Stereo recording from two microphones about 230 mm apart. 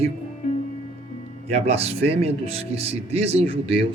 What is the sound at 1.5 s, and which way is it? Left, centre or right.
Speech, right.